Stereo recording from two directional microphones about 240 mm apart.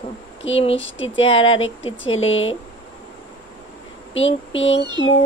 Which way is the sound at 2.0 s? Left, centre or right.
Left.